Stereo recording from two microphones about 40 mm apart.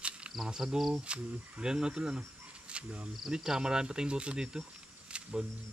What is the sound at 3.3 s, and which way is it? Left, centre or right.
Speech, centre.